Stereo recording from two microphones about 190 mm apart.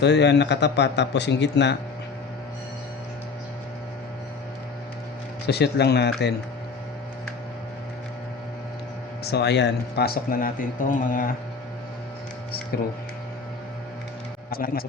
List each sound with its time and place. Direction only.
0.0 s speech: 65° left (ahead or behind)
5.5 s speech: 60° left (ahead or behind)
9.2 s speech: 60° left (ahead or behind); by 11.3 s 45° left (ahead or behind)
12.7 s speech: 55° left (ahead or behind)
14.5 s speech: 50° left (ahead or behind)